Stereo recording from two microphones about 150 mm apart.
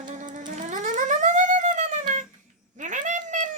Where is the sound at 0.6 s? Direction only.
55° right (ahead or behind).